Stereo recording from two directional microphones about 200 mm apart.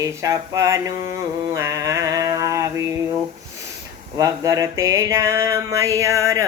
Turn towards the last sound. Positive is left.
turn(degrees=-15)  # may be behind; listen again after turning